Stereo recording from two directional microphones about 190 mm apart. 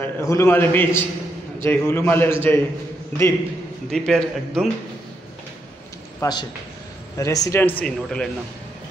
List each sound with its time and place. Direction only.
0.0 s a man's voice: 15° left (ahead or behind)
3.9 s a man's voice: 5° left (ahead or behind)
6.1 s a man's voice: 20° left (ahead or behind); by 8.3 s 5° left (ahead or behind)